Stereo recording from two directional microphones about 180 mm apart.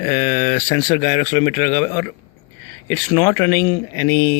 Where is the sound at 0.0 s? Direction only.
20° left (ahead or behind).